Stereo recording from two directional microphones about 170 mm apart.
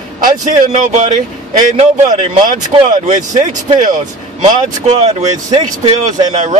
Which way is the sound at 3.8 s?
45° right (ahead or behind).